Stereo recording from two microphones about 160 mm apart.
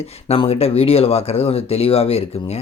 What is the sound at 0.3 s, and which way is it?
Speech, 40° left (ahead or behind).